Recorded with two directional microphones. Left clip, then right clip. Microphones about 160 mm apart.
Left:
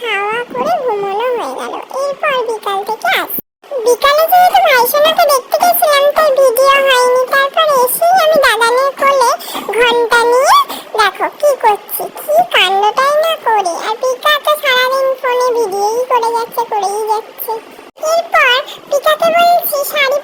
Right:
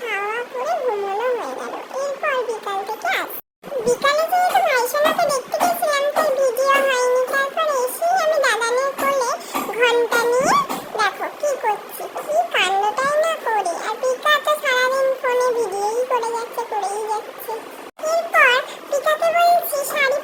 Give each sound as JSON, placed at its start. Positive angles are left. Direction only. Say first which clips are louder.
{"t": 0.0, "sound": "dog", "louder": "left 8 dB", "side_deg": 45}
{"t": 3.8, "sound": "a sound", "louder": "left 9 dB", "side_deg": 40}
{"t": 6.6, "sound": "music", "louder": "left 8 dB", "side_deg": 45}
{"t": 8.0, "sound": "a sound", "louder": "left 8 dB", "side_deg": 45}
{"t": 13.7, "sound": "synthetic singing", "louder": "left 6 dB", "side_deg": 30}
{"t": 15.2, "sound": "music", "louder": "left 6 dB", "side_deg": 30}
{"t": 15.7, "sound": "music", "louder": "left 8 dB", "side_deg": 5}
{"t": 16.0, "sound": "a sound", "louder": "left 9 dB", "side_deg": 30}
{"t": 18.0, "sound": "synthetic singing", "louder": "left 5 dB", "side_deg": 35}